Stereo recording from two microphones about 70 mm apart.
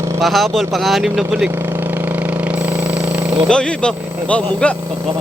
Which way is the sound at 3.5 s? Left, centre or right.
Centre.